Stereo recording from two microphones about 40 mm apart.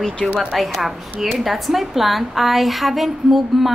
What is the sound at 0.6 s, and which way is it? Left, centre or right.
A woman's voice, centre.